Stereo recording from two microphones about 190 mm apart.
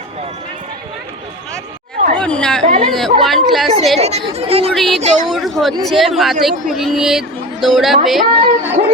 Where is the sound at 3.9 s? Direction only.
35° right (ahead or behind).